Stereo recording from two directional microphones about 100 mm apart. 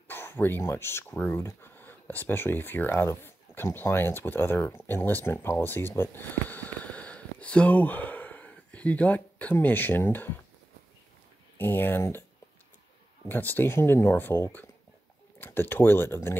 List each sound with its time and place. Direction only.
0.1 s speech: 20° left (ahead or behind)
11.5 s speech: 20° left (ahead or behind)
13.3 s speech: 20° left (ahead or behind)